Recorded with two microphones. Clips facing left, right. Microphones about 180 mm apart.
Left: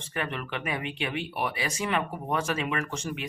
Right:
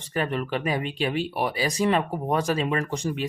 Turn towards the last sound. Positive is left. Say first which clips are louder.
# right 5 dB
turn(degrees=-35)  # may be behind; listen again after turning